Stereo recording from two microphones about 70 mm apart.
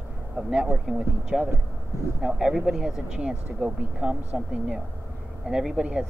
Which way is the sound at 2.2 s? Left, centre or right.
Centre.